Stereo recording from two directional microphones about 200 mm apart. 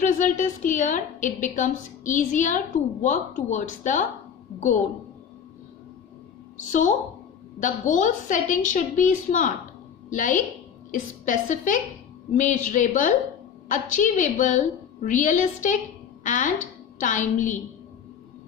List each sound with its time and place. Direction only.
0.0 s a woman's voice: 40° left (ahead or behind)
6.7 s a woman's voice: 40° left (ahead or behind)